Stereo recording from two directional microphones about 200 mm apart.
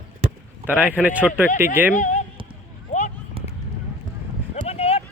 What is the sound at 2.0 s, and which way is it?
Speech, 40° left (ahead or behind).